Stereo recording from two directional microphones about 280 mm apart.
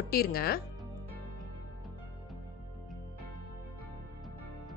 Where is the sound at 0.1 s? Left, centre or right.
Left.